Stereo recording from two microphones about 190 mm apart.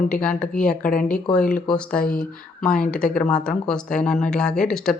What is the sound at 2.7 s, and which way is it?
Speech, 5° left (ahead or behind).